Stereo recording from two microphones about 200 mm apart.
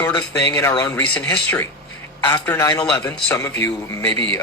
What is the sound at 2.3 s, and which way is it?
A man's voice, 10° left (ahead or behind).